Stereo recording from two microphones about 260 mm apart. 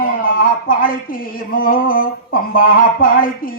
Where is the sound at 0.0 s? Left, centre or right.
Left.